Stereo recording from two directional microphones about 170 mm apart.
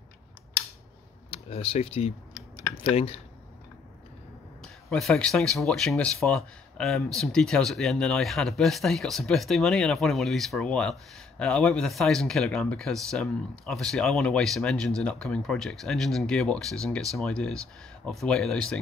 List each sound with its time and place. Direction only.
1.3 s speech: 35° left (ahead or behind)
4.6 s speech: centre (ahead or behind)